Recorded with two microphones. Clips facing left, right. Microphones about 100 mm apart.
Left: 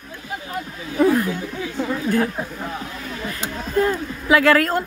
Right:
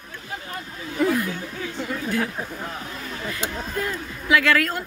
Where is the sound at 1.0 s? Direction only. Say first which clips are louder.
Left 5 dB; 35° left (ahead or behind).